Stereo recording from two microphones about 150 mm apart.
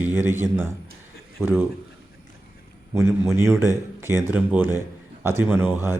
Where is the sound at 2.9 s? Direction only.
15° right (ahead or behind).